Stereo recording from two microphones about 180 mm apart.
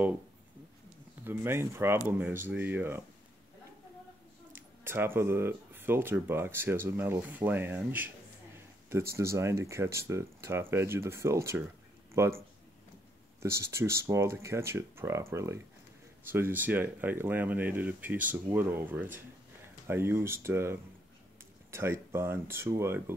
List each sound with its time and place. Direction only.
1.2 s speech: 10° right (ahead or behind)
4.5 s speech: 10° right (ahead or behind)
9.1 s speech: 15° right (ahead or behind)